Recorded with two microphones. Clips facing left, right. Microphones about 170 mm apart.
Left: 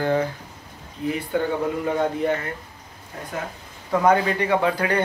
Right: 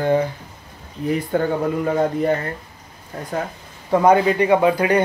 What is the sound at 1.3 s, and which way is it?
Speech, 45° right (ahead or behind).